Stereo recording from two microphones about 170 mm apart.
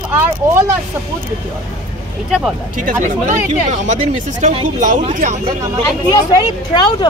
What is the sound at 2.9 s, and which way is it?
Speech, 50° right (ahead or behind).